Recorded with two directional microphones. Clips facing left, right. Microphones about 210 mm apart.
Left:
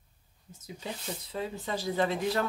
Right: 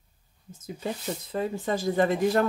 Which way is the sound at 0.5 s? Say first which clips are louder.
Right 7 dB; 50° right (ahead or behind).